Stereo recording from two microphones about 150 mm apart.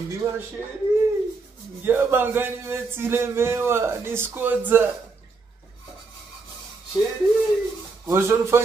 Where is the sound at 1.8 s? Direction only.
15° right (ahead or behind).